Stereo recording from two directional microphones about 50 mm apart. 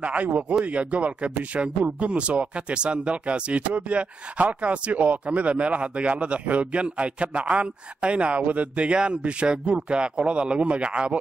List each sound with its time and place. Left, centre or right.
0.0 s speech: right